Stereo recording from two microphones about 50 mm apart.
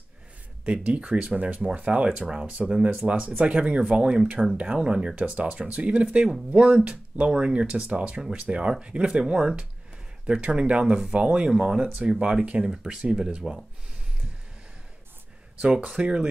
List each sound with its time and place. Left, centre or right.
0.7 s speech: right
12.6 s speech: centre
15.6 s speech: right